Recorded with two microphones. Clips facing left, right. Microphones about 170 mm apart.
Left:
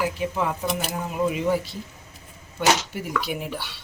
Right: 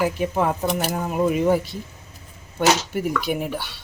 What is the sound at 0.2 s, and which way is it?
Speech, 50° right (ahead or behind).